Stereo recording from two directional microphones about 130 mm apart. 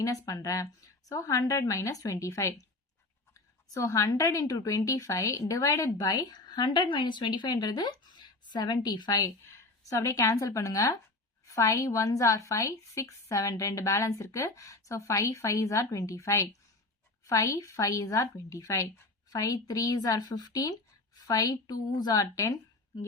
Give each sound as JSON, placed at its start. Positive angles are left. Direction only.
{"t": 0.0, "sound": "a woman's voice", "side_deg": 25}